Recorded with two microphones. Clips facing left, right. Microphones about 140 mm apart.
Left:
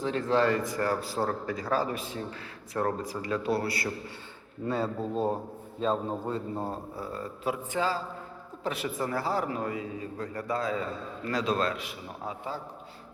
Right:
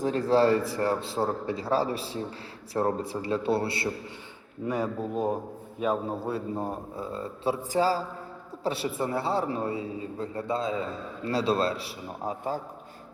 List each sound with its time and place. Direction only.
0.0 s a man's voice: 40° right (ahead or behind)
4.6 s a man's voice: 15° right (ahead or behind); by 12.5 s 40° right (ahead or behind)